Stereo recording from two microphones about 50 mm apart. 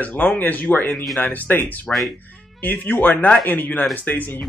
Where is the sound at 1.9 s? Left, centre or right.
Centre.